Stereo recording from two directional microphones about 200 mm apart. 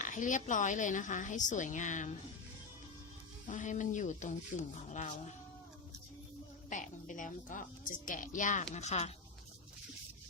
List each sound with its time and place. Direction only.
0.0 s a woman's voice: 40° left (ahead or behind)
3.4 s a woman's voice: 40° left (ahead or behind)
6.7 s a woman's voice: 40° left (ahead or behind)